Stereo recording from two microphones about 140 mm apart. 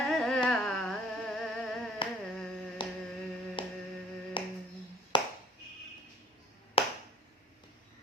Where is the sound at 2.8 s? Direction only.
35° left (ahead or behind).